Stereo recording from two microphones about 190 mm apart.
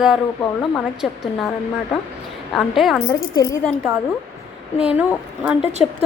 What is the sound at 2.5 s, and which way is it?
Speech, centre (ahead or behind).